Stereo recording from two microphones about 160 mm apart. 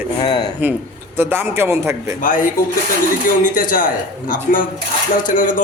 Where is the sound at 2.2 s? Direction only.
55° left (ahead or behind).